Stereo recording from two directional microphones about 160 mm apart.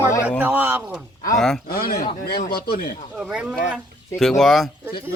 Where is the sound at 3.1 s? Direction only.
5° right (ahead or behind).